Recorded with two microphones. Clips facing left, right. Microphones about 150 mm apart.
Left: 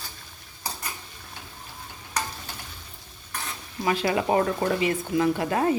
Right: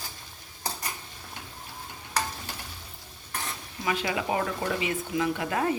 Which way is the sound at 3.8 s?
35° left (ahead or behind).